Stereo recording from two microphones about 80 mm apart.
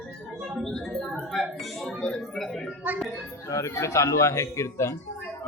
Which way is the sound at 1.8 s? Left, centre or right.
Centre.